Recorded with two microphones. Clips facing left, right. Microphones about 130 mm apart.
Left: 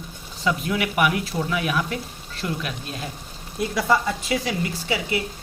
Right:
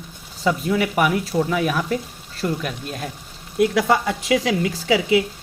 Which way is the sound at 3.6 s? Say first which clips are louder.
Right 4 dB; 75° right (ahead or behind).